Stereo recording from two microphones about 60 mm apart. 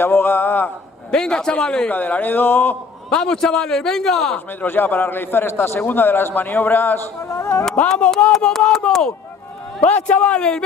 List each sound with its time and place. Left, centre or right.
0.0 s a man's voice: left
1.1 s a man's voice: centre
1.9 s a man's voice: left
3.1 s a man's voice: centre
4.6 s a man's voice: left
7.2 s speech: left
7.9 s a man's voice: centre
9.8 s a man's voice: left